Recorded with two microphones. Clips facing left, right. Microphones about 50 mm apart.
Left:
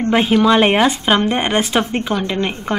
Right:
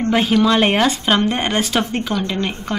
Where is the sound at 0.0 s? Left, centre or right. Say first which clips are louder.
Left 2 dB; centre.